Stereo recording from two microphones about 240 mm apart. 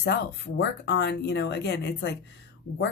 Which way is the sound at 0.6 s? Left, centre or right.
Left.